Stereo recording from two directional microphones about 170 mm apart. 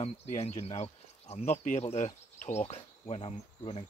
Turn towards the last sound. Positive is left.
turn(degrees=35)  # may be behind; listen again after turning